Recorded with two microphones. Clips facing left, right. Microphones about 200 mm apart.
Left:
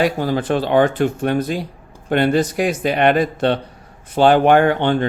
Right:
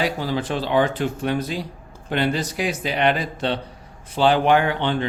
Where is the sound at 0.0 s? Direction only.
50° left (ahead or behind).